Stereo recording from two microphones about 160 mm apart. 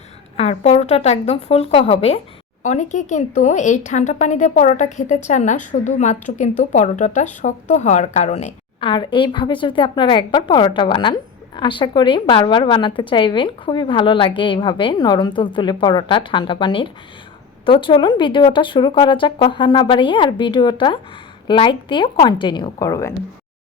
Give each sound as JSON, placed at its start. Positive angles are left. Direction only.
{"t": 0.3, "sound": "a woman's voice", "side_deg": 40}
{"t": 2.6, "sound": "a woman's voice", "side_deg": 50}
{"t": 8.8, "sound": "a woman's voice", "side_deg": 30}